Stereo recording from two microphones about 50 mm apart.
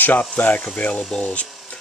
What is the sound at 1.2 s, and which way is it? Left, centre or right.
Speech, left.